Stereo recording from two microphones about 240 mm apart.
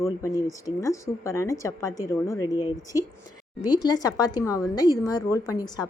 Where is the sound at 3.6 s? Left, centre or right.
Centre.